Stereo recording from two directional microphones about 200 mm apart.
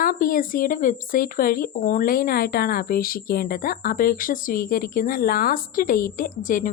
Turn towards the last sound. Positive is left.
turn(degrees=45)  # may be behind; listen again after turning